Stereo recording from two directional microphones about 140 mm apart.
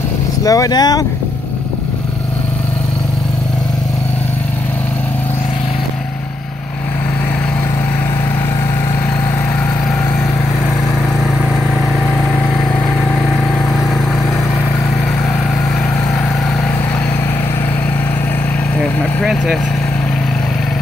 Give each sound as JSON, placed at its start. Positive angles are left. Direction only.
{"t": 0.4, "sound": "speech", "side_deg": 25}
{"t": 19.2, "sound": "vehicle", "side_deg": 0}